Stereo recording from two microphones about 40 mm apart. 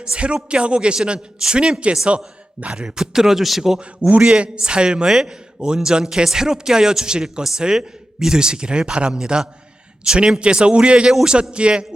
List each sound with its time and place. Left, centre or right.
0.0 s a man's voice: right
3.0 s speech: centre
4.0 s a man's voice: right
11.1 s speech: centre
11.5 s a man's voice: right